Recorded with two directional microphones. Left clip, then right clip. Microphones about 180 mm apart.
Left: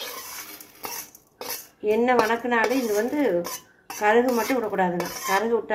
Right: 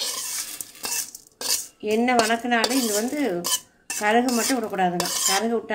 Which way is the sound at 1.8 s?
70° right (ahead or behind).